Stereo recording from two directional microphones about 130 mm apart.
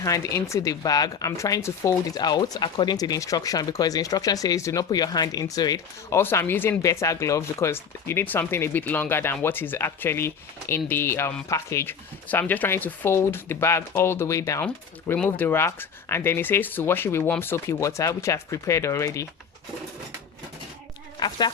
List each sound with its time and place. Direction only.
0.0 s speech: 25° left (ahead or behind)
14.6 s speech: 10° left (ahead or behind)
21.2 s speech: 35° left (ahead or behind)